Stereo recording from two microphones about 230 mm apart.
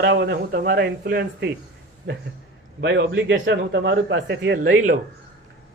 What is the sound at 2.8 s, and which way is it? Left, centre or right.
A man's voice, right.